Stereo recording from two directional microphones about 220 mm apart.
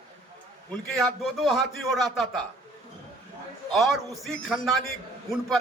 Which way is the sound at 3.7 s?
Centre (ahead or behind).